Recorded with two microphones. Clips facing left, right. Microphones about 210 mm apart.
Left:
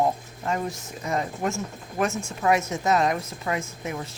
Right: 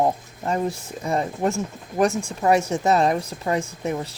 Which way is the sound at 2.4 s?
35° right (ahead or behind).